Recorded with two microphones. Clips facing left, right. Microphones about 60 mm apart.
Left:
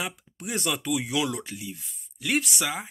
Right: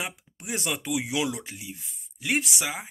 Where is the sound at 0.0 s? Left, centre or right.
Centre.